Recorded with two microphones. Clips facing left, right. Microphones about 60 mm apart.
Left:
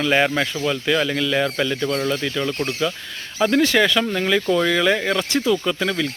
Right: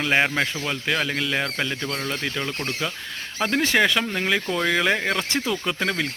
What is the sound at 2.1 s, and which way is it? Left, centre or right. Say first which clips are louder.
Speech: left 5 dB; centre.